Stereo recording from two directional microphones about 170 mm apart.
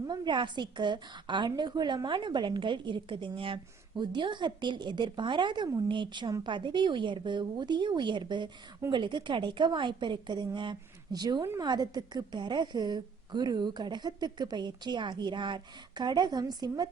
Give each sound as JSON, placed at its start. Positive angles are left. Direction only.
{"t": 0.1, "sound": "a woman's voice", "side_deg": -25}